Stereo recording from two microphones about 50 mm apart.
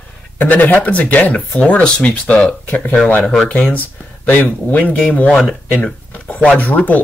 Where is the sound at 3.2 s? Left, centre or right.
Centre.